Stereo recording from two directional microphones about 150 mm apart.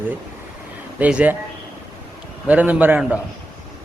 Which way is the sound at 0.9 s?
10° right (ahead or behind).